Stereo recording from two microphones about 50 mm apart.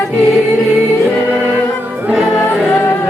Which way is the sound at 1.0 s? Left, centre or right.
Left.